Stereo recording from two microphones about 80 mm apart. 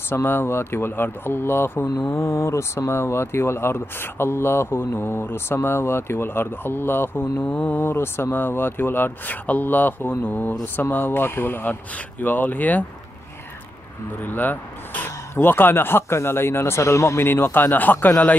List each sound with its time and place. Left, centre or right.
0.1 s speech: left
14.2 s speech: left